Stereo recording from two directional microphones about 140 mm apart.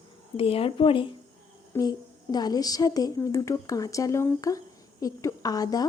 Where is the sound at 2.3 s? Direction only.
30° left (ahead or behind).